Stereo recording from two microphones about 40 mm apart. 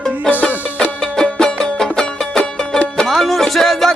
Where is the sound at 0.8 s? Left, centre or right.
Centre.